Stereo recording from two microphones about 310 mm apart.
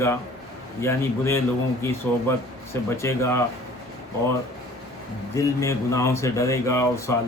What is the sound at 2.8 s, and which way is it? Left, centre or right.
Speech, centre.